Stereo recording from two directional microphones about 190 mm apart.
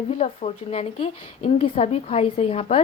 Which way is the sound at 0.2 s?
35° left (ahead or behind).